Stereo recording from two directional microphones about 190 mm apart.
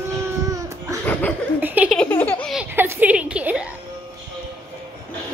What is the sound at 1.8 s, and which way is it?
Laughter, 5° left (ahead or behind).